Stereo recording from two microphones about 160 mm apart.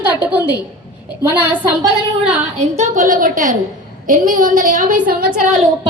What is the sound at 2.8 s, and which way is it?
A woman's voice, 55° right (ahead or behind).